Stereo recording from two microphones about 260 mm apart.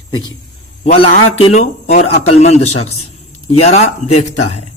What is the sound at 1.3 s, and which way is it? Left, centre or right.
Speech, left.